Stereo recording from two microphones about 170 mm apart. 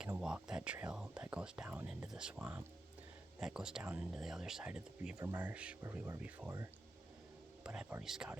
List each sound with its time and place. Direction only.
0.2 s speech: 5° right (ahead or behind)